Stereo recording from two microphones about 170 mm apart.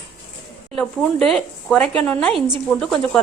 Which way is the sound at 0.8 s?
5° left (ahead or behind).